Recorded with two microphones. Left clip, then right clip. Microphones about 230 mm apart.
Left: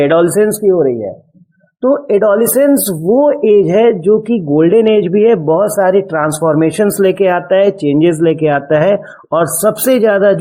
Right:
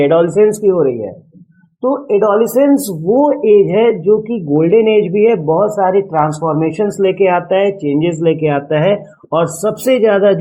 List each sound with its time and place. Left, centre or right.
0.0 s a man's voice: left
0.6 s speech: left
1.8 s a man's voice: left